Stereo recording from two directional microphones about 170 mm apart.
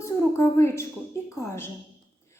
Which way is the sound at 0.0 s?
15° left (ahead or behind).